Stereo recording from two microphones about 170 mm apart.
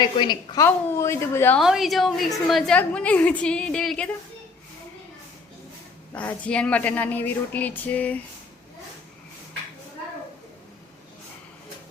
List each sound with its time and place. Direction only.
0.0 s speech: 25° left (ahead or behind)
1.5 s a woman's voice: centre (ahead or behind)
6.1 s speech: 10° left (ahead or behind)